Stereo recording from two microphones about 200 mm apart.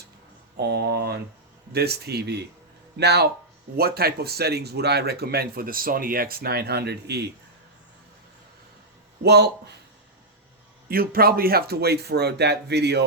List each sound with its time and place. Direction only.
0.5 s speech: 55° right (ahead or behind)
9.2 s speech: 55° right (ahead or behind)
10.8 s speech: 50° right (ahead or behind)